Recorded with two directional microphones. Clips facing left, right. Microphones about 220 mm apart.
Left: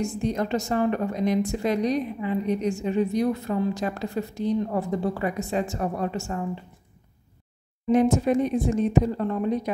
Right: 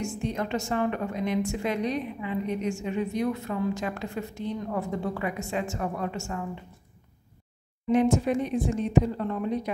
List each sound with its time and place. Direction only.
0.0 s a woman's voice: 40° left (ahead or behind)
7.9 s a woman's voice: 40° left (ahead or behind)